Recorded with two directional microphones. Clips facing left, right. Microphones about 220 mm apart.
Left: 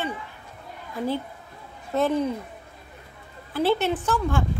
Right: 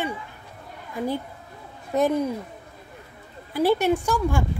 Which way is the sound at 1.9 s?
10° right (ahead or behind).